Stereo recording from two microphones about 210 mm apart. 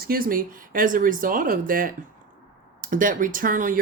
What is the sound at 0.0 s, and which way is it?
Speech, 45° right (ahead or behind).